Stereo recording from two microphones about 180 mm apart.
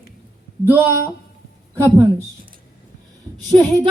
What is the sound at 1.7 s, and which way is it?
Speech, 15° right (ahead or behind).